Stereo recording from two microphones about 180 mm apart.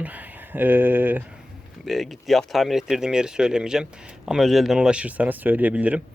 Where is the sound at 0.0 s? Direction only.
10° right (ahead or behind).